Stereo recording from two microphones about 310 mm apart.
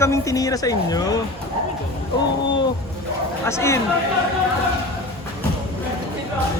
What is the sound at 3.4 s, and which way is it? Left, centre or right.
Speech, centre.